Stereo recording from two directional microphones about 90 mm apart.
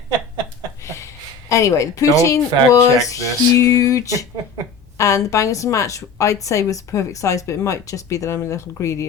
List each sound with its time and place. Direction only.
0.9 s a woman's voice: 35° left (ahead or behind)